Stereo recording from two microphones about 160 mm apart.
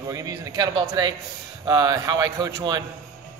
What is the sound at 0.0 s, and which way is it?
Speech, 20° right (ahead or behind).